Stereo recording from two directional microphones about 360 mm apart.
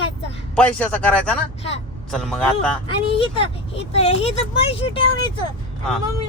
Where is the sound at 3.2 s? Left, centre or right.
Centre.